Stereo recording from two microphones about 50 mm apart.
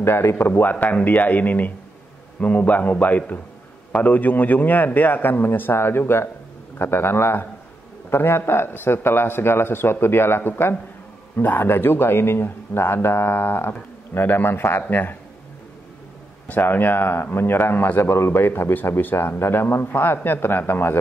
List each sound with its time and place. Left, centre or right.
0.0 s speech: left
0.5 s a man's voice: left
16.4 s speech: left